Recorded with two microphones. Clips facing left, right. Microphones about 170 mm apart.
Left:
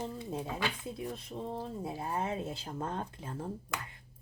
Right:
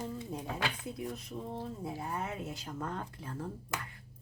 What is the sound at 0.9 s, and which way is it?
Speech, 30° left (ahead or behind).